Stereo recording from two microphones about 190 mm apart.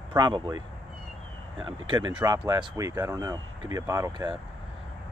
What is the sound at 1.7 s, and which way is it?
Speech, 25° right (ahead or behind).